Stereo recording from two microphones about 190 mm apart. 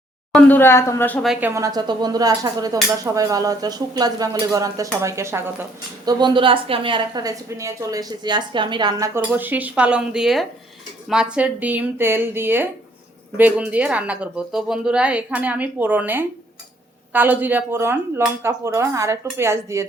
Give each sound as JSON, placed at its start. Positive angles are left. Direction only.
{"t": 0.3, "sound": "speech", "side_deg": 10}
{"t": 1.3, "sound": "a woman's voice", "side_deg": -10}
{"t": 6.1, "sound": "a woman's voice", "side_deg": -25}